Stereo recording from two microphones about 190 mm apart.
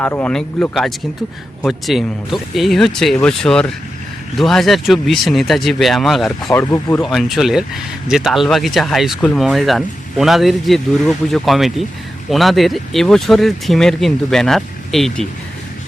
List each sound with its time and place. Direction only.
0.0 s speech: 10° left (ahead or behind)
6.5 s speech: 15° left (ahead or behind)
7.0 s speech: centre (ahead or behind)